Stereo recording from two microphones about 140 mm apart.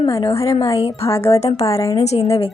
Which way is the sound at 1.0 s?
20° left (ahead or behind).